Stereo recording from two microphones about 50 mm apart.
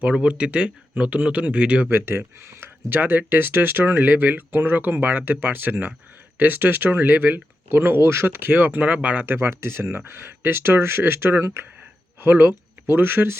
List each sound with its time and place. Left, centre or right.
0.0 s speech: right
1.9 s speech: right
2.9 s speech: right
7.7 s speech: right
9.2 s speech: right
12.9 s speech: right